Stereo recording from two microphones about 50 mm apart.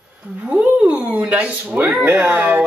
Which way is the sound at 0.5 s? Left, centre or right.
Right.